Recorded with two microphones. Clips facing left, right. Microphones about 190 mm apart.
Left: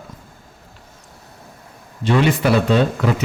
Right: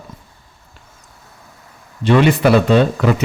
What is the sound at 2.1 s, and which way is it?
Speech, 70° right (ahead or behind).